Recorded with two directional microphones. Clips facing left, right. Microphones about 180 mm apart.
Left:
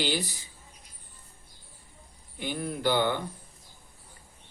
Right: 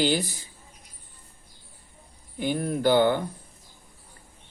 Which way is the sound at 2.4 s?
50° right (ahead or behind).